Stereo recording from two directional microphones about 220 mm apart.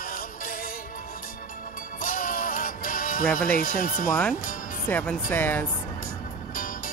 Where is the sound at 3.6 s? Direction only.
40° left (ahead or behind).